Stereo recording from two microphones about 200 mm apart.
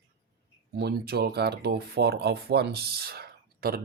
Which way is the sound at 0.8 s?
50° right (ahead or behind).